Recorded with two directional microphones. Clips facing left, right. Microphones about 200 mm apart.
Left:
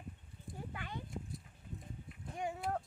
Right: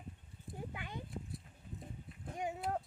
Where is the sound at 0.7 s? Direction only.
15° right (ahead or behind).